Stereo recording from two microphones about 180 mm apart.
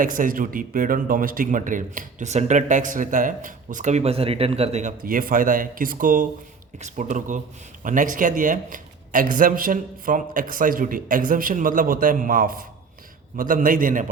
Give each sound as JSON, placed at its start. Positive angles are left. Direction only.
{"t": 0.0, "sound": "a man's voice", "side_deg": -50}